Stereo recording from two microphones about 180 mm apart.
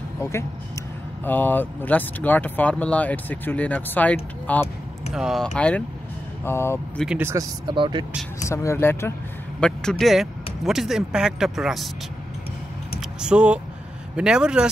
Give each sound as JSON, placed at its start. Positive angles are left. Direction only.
{"t": 0.2, "sound": "speech", "side_deg": 15}
{"t": 5.1, "sound": "speech", "side_deg": 0}
{"t": 7.2, "sound": "speech", "side_deg": -15}
{"t": 8.5, "sound": "speech", "side_deg": 15}
{"t": 13.2, "sound": "speech", "side_deg": -5}